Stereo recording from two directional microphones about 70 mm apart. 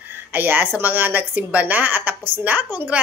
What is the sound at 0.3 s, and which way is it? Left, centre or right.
A woman's voice, right.